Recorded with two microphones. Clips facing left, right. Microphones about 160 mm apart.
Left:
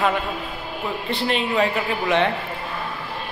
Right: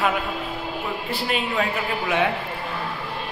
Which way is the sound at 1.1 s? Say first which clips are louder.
Left 4 dB; 5° right (ahead or behind).